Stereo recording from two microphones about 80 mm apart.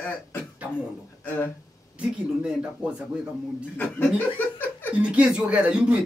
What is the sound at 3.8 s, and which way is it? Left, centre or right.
Speech, left.